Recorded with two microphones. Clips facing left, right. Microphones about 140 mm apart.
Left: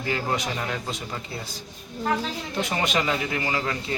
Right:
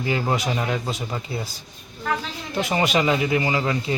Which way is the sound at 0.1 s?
10° right (ahead or behind).